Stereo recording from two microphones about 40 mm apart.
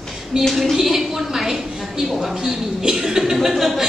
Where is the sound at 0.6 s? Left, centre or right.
Centre.